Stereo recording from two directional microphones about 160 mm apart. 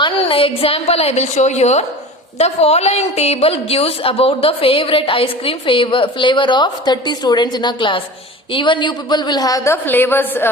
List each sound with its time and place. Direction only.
0.0 s a woman's voice: 35° left (ahead or behind); by 10.5 s 15° left (ahead or behind)